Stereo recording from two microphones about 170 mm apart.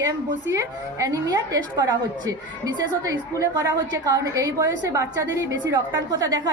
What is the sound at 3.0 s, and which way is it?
A woman's voice, 20° right (ahead or behind).